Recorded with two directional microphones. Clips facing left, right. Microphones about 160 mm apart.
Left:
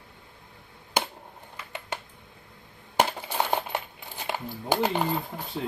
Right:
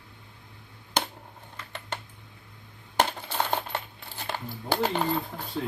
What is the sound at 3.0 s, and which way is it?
Coin, 10° left (ahead or behind).